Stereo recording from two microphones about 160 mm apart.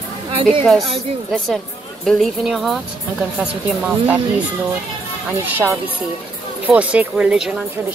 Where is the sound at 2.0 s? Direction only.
Centre (ahead or behind).